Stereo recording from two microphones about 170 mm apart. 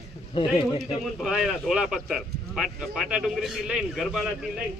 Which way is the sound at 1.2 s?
Centre (ahead or behind).